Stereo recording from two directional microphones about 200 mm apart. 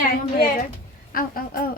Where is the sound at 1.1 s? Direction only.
45° left (ahead or behind).